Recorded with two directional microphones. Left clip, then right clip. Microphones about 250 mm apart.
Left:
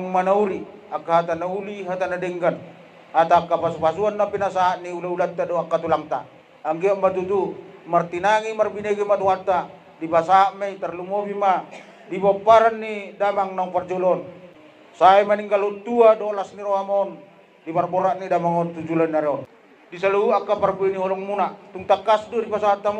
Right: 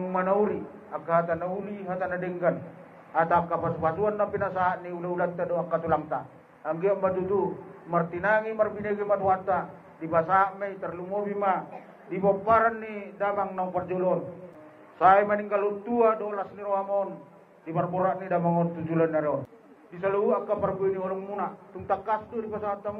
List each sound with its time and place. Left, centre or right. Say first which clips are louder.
0.1 s a man's voice: left 6 dB; left